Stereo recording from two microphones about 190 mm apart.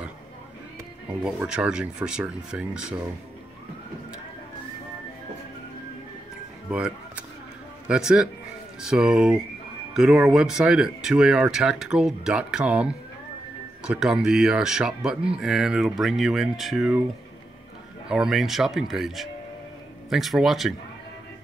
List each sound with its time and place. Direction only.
1.2 s speech: 5° right (ahead or behind)
6.7 s speech: 5° right (ahead or behind)
18.0 s speech: 5° right (ahead or behind)